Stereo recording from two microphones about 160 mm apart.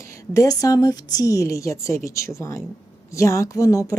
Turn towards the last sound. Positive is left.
turn(degrees=20)  # may be behind; listen again after turning